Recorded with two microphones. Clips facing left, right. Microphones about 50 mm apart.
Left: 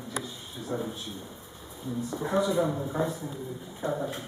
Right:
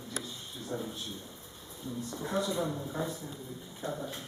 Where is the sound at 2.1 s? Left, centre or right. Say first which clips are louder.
Left 7 dB; centre.